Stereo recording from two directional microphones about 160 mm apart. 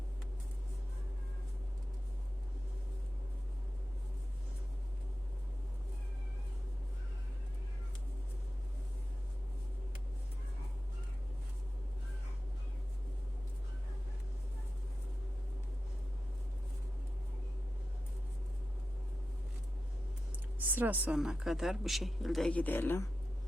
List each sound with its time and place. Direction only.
20.7 s speech: 10° right (ahead or behind); by 23.0 s 10° left (ahead or behind)